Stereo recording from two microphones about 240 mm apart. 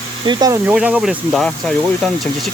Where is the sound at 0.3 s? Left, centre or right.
Centre.